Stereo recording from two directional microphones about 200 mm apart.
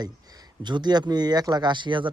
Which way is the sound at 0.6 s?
20° right (ahead or behind).